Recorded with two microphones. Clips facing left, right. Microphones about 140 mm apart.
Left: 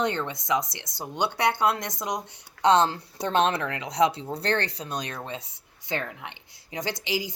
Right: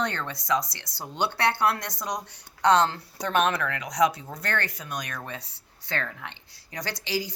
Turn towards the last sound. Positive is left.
turn(degrees=20)  # may be behind; listen again after turning